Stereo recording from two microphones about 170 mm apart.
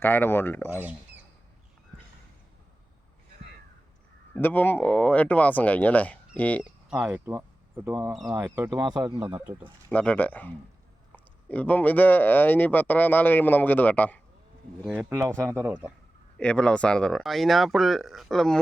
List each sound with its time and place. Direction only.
0.0 s speech: 10° left (ahead or behind)
0.8 s speech: 10° right (ahead or behind)
4.4 s speech: 10° left (ahead or behind)
6.6 s speech: 5° right (ahead or behind)
7.1 s speech: 15° right (ahead or behind)
9.9 s speech: 10° left (ahead or behind)
15.4 s speech: 10° right (ahead or behind)
16.4 s speech: 5° left (ahead or behind)